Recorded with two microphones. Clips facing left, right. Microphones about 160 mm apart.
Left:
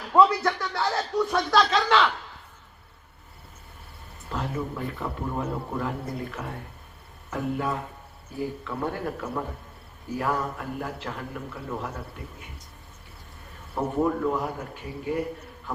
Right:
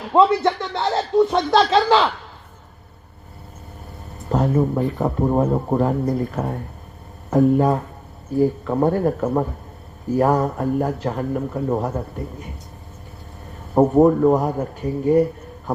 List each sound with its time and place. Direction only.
0.1 s a man's voice: 25° right (ahead or behind)
4.3 s a man's voice: 45° right (ahead or behind)
13.7 s a man's voice: 45° right (ahead or behind)